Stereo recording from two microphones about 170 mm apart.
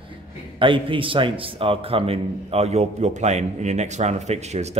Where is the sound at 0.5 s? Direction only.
30° right (ahead or behind).